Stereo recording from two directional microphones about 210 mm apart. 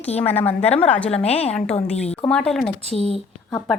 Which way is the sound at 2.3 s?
5° left (ahead or behind).